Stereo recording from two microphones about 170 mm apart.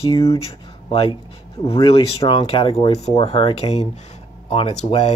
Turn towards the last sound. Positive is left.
turn(degrees=35)  # may be behind; listen again after turning